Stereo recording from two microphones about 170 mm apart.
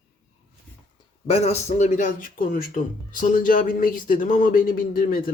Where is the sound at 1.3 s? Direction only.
40° left (ahead or behind); by 5.2 s 60° left (ahead or behind).